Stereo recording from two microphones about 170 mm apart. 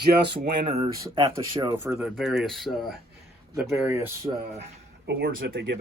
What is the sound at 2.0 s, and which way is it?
Speech, centre (ahead or behind).